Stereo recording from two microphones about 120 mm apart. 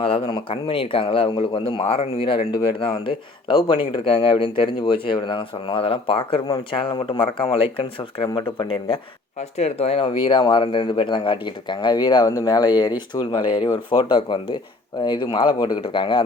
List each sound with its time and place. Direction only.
0.0 s speech: 45° left (ahead or behind)
9.4 s speech: 60° left (ahead or behind); by 16.2 s 40° left (ahead or behind)